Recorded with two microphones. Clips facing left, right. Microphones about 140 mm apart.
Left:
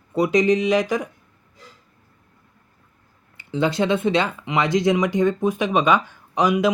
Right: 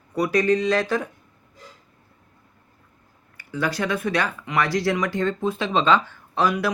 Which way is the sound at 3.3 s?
25° left (ahead or behind).